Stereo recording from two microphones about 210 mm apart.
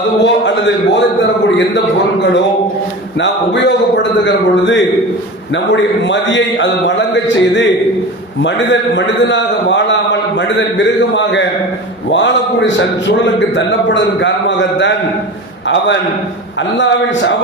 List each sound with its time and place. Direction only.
0.2 s a man's voice: 60° left (ahead or behind)
3.2 s a sound: 55° left (ahead or behind)
5.7 s a man's voice: 60° left (ahead or behind)
16.7 s a man's voice: 60° left (ahead or behind)